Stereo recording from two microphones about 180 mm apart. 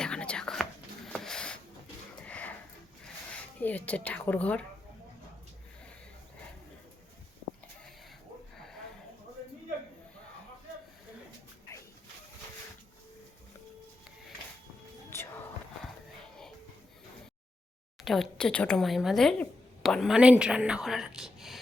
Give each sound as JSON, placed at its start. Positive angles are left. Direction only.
{"t": 0.0, "sound": "whispering", "side_deg": 5}
{"t": 2.2, "sound": "sniff", "side_deg": 10}
{"t": 3.0, "sound": "a sound", "side_deg": 10}
{"t": 15.1, "sound": "music", "side_deg": 15}
{"t": 18.0, "sound": "speech", "side_deg": 0}